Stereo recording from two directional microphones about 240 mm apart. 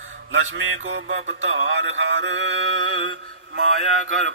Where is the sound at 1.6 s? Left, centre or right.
Right.